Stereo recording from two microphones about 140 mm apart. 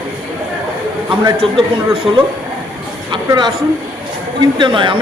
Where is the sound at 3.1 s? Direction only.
30° right (ahead or behind).